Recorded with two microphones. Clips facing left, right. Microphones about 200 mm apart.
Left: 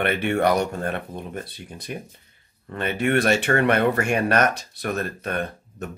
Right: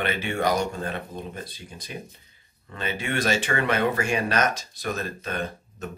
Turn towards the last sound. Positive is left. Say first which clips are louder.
# left 3 dB
turn(degrees=60)  # may be behind; listen again after turning